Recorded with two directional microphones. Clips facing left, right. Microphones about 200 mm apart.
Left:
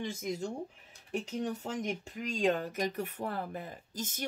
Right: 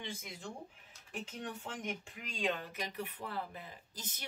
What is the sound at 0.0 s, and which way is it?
Speech, 45° left (ahead or behind).